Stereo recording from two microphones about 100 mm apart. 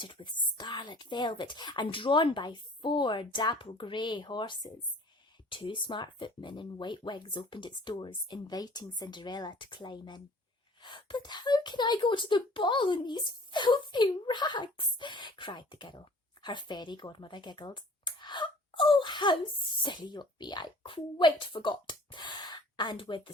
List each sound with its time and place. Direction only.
0.0 s speech: 50° left (ahead or behind)